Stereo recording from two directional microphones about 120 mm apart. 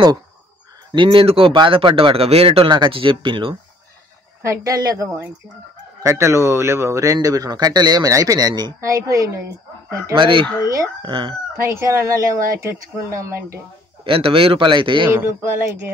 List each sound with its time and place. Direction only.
0.9 s a man's voice: 45° right (ahead or behind)
4.4 s speech: 25° right (ahead or behind)
10.1 s a man's voice: 45° right (ahead or behind)
11.5 s speech: 25° right (ahead or behind)
14.0 s a man's voice: 50° right (ahead or behind)
15.0 s speech: 20° right (ahead or behind)